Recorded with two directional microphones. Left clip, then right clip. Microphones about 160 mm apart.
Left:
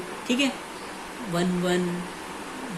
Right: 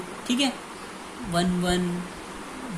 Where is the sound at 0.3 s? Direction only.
45° right (ahead or behind).